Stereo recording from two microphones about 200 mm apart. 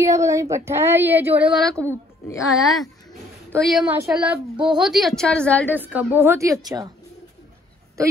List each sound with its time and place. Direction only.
0.0 s a woman's voice: 15° right (ahead or behind); by 5.7 s 5° left (ahead or behind)
5.7 s a woman's voice: 10° right (ahead or behind)